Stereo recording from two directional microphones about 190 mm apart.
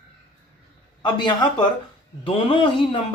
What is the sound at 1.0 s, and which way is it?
Speech, 25° left (ahead or behind).